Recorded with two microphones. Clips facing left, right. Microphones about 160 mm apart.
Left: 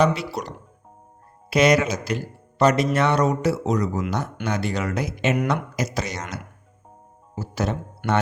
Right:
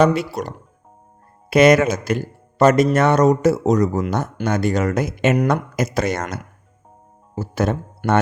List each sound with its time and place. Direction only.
0.0 s a man's voice: 50° right (ahead or behind)